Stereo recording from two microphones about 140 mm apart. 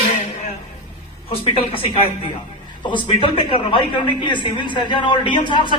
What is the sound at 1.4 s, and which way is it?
Speech, 45° left (ahead or behind).